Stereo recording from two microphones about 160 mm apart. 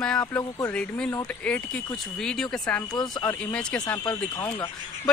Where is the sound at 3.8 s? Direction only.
20° left (ahead or behind).